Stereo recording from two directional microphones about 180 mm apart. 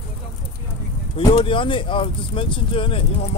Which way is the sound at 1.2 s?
25° left (ahead or behind).